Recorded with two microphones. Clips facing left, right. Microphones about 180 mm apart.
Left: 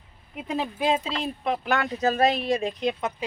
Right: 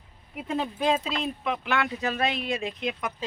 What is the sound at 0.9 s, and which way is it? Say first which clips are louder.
Speech: left 1 dB; 20° left (ahead or behind).